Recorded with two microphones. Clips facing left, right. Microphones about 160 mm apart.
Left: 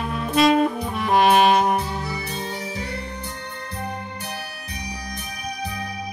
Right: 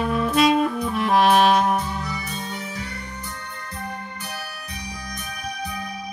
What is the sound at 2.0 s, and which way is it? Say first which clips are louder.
Music: left 1 dB; 30° left (ahead or behind).